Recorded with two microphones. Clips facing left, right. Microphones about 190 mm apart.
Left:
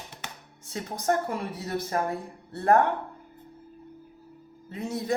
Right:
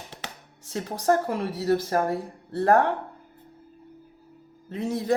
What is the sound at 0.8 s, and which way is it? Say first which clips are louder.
Speech: right 4 dB; 35° right (ahead or behind).